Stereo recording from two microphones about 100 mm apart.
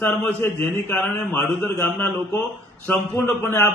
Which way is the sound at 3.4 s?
25° left (ahead or behind).